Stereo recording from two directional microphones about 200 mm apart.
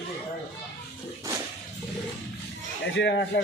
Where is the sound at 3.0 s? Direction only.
60° left (ahead or behind).